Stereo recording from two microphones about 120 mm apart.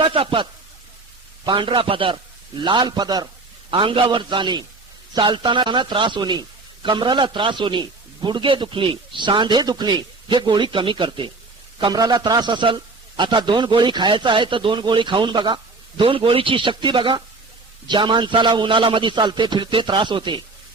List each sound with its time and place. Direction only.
0.0 s speech: 45° right (ahead or behind)
1.5 s a man's voice: 45° right (ahead or behind)